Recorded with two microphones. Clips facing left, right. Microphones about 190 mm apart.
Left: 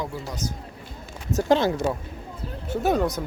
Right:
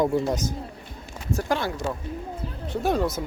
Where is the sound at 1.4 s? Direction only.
20° left (ahead or behind).